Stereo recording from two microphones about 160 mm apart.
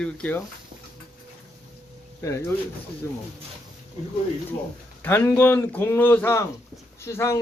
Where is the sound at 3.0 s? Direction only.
15° left (ahead or behind).